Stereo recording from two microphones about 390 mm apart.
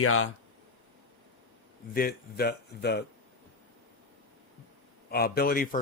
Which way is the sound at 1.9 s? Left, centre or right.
Left.